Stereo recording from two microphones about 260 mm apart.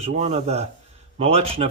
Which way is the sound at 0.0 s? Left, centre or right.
Right.